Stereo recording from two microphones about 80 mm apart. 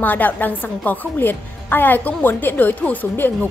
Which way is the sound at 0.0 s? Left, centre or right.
Left.